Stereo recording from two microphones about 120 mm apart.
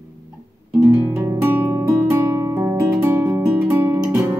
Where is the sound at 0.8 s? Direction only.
15° right (ahead or behind).